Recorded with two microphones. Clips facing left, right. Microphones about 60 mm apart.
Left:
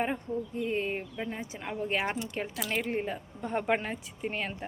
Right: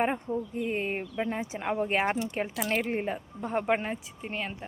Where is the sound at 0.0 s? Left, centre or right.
Right.